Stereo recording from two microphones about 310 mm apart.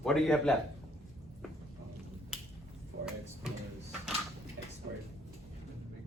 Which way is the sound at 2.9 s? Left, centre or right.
Right.